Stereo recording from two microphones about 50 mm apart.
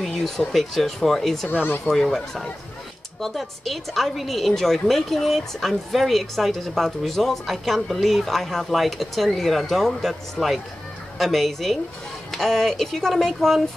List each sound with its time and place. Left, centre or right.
0.0 s a woman's voice: centre
1.5 s speech: left
1.9 s a woman's voice: centre